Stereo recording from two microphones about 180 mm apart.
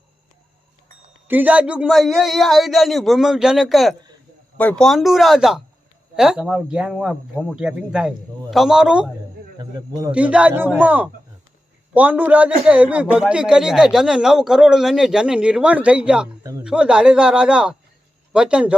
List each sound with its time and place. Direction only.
1.3 s a man's voice: 10° right (ahead or behind)
9.6 s speech: 20° right (ahead or behind)
10.1 s a man's voice: 5° right (ahead or behind)
16.4 s speech: 20° right (ahead or behind)
16.6 s a man's voice: 5° right (ahead or behind)